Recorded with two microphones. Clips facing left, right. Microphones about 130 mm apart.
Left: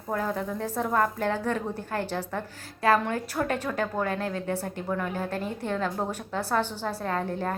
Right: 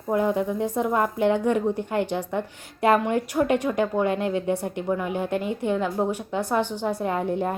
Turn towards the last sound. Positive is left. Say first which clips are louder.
# right 4 dB
turn(degrees=-15)  # may be behind; listen again after turning